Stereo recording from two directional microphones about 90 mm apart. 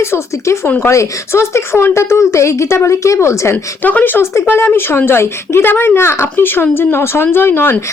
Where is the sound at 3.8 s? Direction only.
20° left (ahead or behind).